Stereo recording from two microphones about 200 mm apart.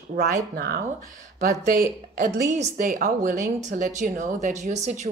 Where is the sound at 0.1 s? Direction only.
40° right (ahead or behind).